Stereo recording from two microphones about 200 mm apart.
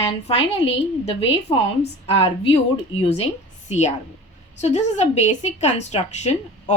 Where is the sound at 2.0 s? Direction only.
30° left (ahead or behind).